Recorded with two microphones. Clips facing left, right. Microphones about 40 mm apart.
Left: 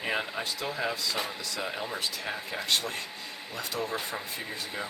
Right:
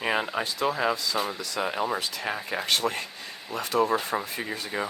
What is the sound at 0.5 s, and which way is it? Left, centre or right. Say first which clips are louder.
Speech: right 8 dB; right.